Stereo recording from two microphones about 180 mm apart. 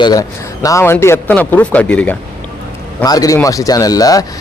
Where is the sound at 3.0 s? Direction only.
20° left (ahead or behind).